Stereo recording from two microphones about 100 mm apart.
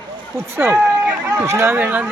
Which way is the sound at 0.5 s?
20° right (ahead or behind).